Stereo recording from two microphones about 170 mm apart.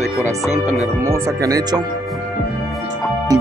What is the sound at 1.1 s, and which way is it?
Speech, 20° right (ahead or behind).